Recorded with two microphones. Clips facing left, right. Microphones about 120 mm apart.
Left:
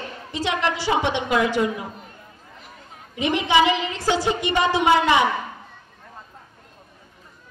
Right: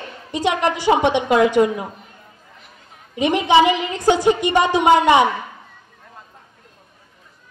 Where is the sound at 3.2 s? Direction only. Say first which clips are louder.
Right 5 dB; 20° right (ahead or behind).